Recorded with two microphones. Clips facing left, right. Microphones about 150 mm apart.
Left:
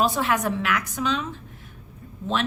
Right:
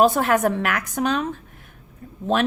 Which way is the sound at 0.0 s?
50° right (ahead or behind).